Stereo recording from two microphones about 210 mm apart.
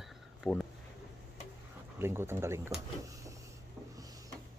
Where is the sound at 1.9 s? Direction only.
10° right (ahead or behind).